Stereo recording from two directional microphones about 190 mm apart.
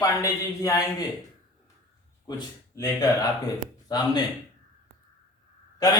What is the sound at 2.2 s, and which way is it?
A man's voice, 15° left (ahead or behind).